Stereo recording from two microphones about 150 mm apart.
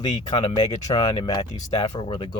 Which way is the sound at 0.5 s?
25° left (ahead or behind).